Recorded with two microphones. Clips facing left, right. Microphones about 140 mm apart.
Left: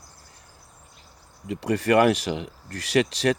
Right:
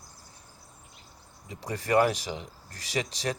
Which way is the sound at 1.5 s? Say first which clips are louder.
Left 8 dB; 70° left (ahead or behind).